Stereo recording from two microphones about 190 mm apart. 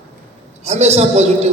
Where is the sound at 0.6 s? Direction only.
35° right (ahead or behind).